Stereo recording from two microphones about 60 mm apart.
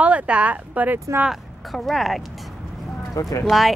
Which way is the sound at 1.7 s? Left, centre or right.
Centre.